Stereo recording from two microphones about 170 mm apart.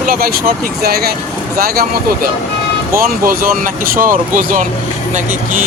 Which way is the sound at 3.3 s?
55° right (ahead or behind).